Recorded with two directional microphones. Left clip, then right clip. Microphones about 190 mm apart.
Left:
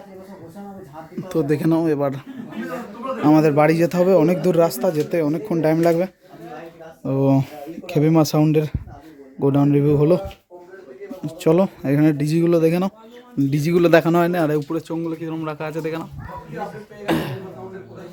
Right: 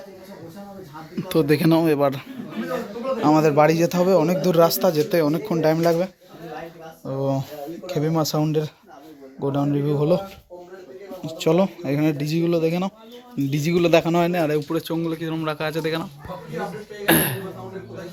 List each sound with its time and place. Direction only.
1.1 s speech: 10° left (ahead or behind)
3.2 s speech: 30° left (ahead or behind)
4.6 s speech: 20° left (ahead or behind)
7.0 s speech: 45° left (ahead or behind)
11.3 s speech: 30° left (ahead or behind)
14.7 s speech: 10° left (ahead or behind)
17.1 s throat clearing: centre (ahead or behind)